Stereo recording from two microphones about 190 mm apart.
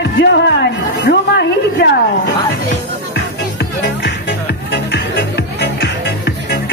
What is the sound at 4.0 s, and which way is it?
Music, 65° left (ahead or behind).